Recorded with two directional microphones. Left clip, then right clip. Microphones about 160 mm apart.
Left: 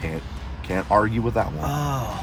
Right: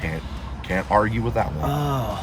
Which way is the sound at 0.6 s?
30° left (ahead or behind).